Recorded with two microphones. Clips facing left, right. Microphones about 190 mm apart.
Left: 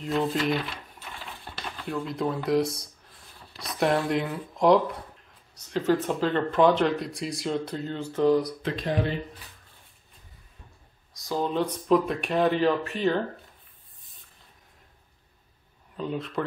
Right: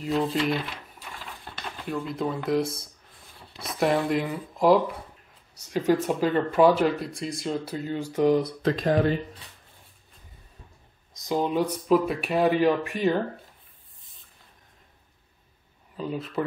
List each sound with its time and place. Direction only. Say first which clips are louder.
0.0 s speech: right 1 dB; centre (ahead or behind)
1.9 s speech: even; centre (ahead or behind)
8.6 s speech: right 5 dB; 45° right (ahead or behind)
11.1 s speech: right 2 dB; 15° right (ahead or behind)
16.0 s speech: right 1 dB; 5° right (ahead or behind)